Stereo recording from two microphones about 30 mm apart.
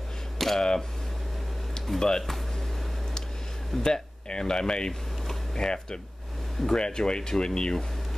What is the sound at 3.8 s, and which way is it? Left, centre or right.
Speech, left.